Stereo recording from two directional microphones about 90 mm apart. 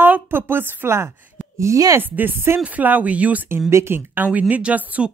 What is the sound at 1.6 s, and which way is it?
Speech, 40° right (ahead or behind).